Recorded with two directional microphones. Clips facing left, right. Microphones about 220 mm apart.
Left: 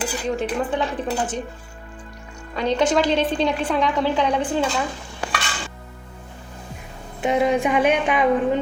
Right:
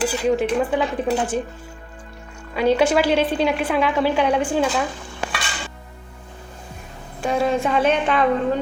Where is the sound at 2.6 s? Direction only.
10° right (ahead or behind).